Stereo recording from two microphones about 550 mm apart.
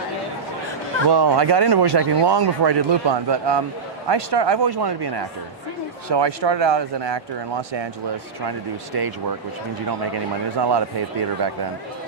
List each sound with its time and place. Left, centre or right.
1.0 s speech: right
10.6 s speech: right